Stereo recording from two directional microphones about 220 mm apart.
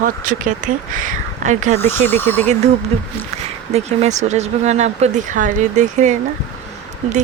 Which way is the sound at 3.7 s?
30° right (ahead or behind).